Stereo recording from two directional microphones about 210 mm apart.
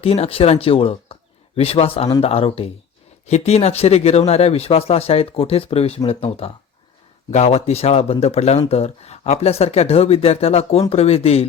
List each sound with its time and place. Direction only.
0.0 s speech: 30° left (ahead or behind)